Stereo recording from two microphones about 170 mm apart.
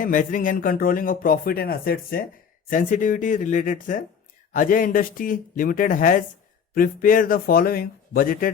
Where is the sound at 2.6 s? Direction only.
50° left (ahead or behind).